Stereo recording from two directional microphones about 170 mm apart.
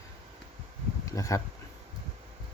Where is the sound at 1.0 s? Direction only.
20° left (ahead or behind).